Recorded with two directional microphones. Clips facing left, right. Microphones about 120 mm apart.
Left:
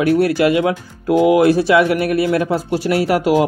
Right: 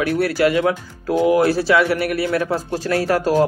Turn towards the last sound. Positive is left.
turn(degrees=15)  # may be behind; listen again after turning